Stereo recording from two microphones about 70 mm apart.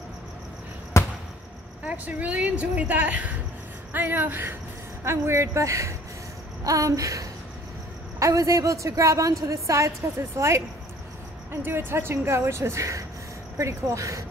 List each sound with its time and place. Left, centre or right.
1.0 s basketball bounce: left
1.9 s a woman's voice: right
11.6 s a woman's voice: right